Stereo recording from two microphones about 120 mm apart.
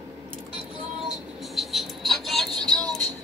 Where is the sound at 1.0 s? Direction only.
Centre (ahead or behind).